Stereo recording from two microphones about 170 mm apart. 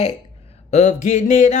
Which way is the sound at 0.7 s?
45° left (ahead or behind).